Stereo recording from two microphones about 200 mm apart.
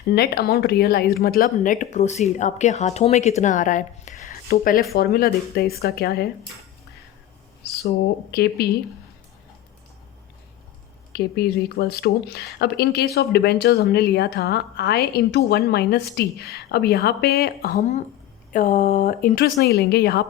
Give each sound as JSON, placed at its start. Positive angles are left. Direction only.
{"t": 0.1, "sound": "a woman's voice", "side_deg": 50}
{"t": 8.3, "sound": "speech", "side_deg": 50}
{"t": 11.1, "sound": "speech", "side_deg": 50}